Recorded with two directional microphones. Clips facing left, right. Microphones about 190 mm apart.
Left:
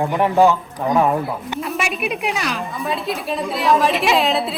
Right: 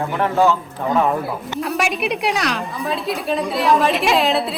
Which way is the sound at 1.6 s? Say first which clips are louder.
Right 4 dB; centre (ahead or behind).